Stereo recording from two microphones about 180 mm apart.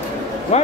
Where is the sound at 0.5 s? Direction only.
40° left (ahead or behind).